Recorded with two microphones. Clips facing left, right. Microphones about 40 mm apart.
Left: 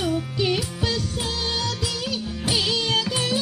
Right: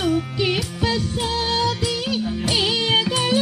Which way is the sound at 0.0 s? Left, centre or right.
Centre.